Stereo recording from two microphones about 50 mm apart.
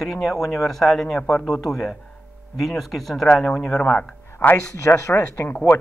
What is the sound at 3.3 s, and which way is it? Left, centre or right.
Speech, centre.